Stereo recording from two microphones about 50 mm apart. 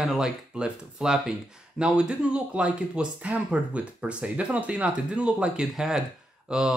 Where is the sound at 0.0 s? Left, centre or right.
Centre.